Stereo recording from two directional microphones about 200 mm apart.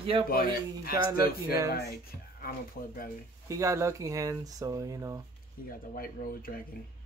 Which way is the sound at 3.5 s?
15° right (ahead or behind).